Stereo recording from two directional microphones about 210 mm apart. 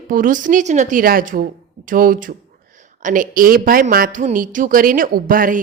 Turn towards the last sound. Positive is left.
turn(degrees=-40)  # may be behind; listen again after turning